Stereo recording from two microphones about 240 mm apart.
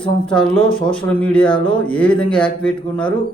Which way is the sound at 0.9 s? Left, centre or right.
Centre.